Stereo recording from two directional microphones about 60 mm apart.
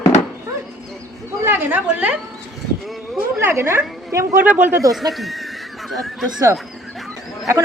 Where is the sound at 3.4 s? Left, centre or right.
Right.